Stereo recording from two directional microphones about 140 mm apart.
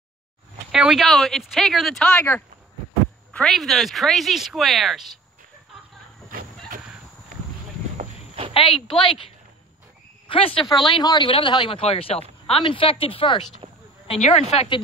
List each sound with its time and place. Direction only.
0.7 s speech: 5° right (ahead or behind); by 2.4 s 15° left (ahead or behind)
3.3 s speech: centre (ahead or behind)
8.5 s speech: 40° left (ahead or behind)
13.6 s a sound: 40° right (ahead or behind)
14.0 s speech: 45° left (ahead or behind)